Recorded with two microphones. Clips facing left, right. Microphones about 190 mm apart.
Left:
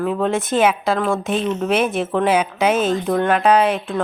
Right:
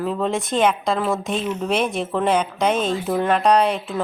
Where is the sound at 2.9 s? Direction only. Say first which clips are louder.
Left 2 dB; 5° right (ahead or behind).